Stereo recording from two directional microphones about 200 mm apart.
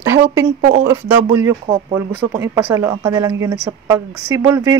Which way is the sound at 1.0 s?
10° right (ahead or behind).